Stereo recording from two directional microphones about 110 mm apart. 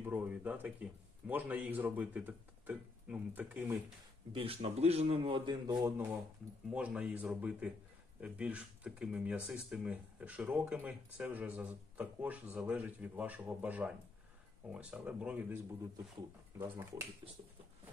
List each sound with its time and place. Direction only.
0.0 s speech: 15° right (ahead or behind)
4.3 s a man's voice: 55° right (ahead or behind)
5.9 s speech: 20° right (ahead or behind)